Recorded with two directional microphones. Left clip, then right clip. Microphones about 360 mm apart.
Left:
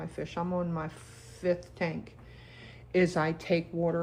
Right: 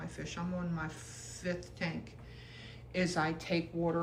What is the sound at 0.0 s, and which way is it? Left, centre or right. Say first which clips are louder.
A woman's voice: left 7 dB; centre.